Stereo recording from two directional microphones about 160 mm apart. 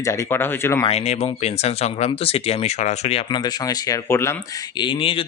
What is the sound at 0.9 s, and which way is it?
Speech, 40° left (ahead or behind).